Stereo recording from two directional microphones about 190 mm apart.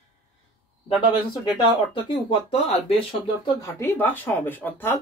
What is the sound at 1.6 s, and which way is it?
Speech, 30° left (ahead or behind).